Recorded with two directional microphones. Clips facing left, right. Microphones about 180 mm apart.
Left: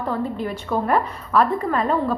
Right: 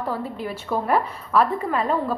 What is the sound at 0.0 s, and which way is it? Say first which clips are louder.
A woman's voice: left 3 dB; 5° right (ahead or behind).